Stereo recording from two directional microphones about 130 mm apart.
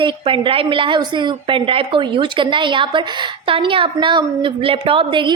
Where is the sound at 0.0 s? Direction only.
40° right (ahead or behind).